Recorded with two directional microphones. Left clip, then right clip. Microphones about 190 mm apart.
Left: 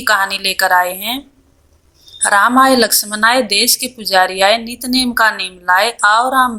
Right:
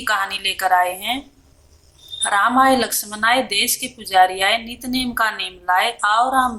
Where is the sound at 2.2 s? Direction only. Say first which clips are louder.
Left 5 dB; 35° left (ahead or behind).